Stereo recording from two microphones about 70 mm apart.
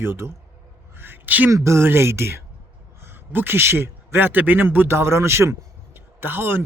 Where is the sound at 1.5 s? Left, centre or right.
Right.